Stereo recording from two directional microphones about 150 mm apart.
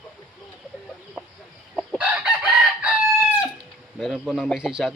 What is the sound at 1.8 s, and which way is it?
Chicken, 10° right (ahead or behind).